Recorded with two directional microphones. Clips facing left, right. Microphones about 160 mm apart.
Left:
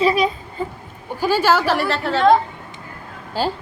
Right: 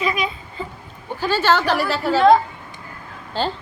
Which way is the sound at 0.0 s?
35° left (ahead or behind).